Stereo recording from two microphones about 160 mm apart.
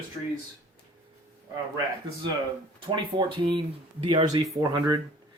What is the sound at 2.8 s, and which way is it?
Speech, 30° right (ahead or behind).